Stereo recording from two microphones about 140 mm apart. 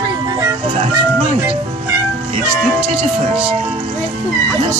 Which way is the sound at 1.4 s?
15° right (ahead or behind).